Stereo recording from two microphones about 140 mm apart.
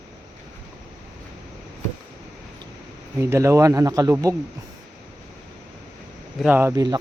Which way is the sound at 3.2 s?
20° right (ahead or behind).